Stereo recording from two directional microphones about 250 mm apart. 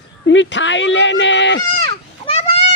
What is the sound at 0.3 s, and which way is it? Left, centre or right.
Speech, left.